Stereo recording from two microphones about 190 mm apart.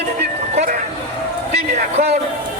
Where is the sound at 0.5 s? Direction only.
40° right (ahead or behind).